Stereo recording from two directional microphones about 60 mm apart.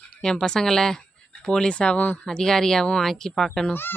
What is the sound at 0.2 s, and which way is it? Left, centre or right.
Speech, centre.